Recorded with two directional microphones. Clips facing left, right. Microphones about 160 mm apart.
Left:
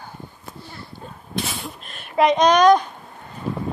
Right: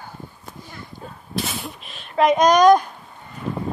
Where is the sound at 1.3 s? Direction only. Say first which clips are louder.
Right 1 dB; centre (ahead or behind).